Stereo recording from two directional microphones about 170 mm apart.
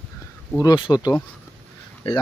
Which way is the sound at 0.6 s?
25° left (ahead or behind).